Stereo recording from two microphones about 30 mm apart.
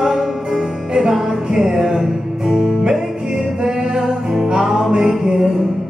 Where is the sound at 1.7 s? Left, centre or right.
Centre.